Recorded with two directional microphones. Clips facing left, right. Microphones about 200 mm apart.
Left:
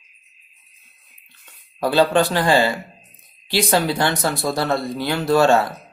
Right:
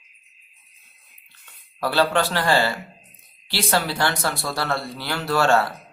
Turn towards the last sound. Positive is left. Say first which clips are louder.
# left 4 dB
turn(degrees=15)  # may be behind; listen again after turning